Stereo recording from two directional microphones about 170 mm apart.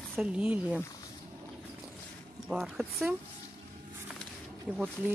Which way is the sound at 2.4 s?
5° right (ahead or behind).